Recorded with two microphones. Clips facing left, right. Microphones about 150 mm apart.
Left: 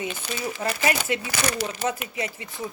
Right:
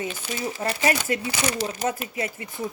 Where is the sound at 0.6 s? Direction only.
40° right (ahead or behind).